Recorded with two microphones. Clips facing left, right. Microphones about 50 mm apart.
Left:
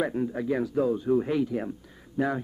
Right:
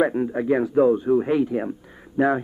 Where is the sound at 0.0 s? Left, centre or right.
Right.